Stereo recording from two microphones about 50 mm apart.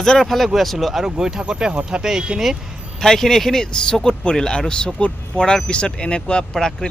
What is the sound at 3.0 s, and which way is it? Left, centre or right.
Speech, centre.